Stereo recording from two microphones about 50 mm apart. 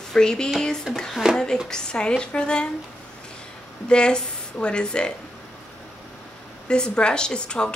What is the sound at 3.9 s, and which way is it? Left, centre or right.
Speech, centre.